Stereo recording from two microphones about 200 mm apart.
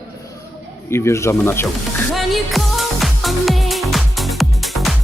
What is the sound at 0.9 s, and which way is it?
Speech, 15° left (ahead or behind).